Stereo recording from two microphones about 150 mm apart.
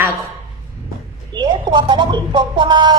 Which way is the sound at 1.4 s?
30° right (ahead or behind).